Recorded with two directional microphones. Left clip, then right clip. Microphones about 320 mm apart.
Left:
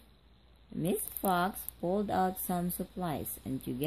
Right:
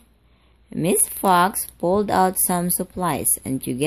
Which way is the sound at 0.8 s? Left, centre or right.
Centre.